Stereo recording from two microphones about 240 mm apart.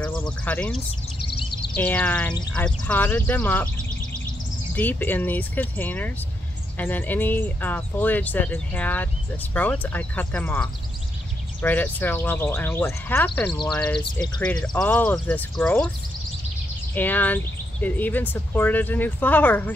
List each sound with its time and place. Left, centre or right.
0.5 s speech: centre
1.2 s a sound: left
1.8 s speech: centre
4.7 s speech: centre
14.1 s speech: centre
14.8 s speech: centre
16.9 s speech: centre